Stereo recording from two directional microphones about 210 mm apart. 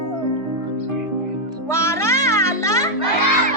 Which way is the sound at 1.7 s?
15° left (ahead or behind).